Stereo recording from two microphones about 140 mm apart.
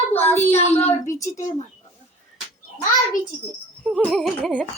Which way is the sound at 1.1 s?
20° left (ahead or behind).